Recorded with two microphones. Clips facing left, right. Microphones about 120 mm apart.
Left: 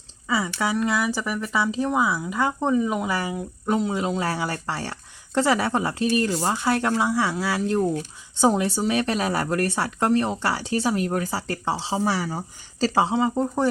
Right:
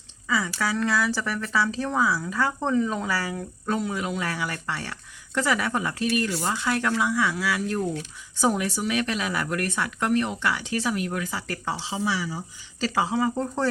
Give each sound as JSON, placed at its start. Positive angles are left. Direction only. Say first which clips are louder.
{"t": 0.3, "sound": "speech", "louder": "left 2 dB", "side_deg": 25}
{"t": 12.4, "sound": "speech", "louder": "left 5 dB", "side_deg": 35}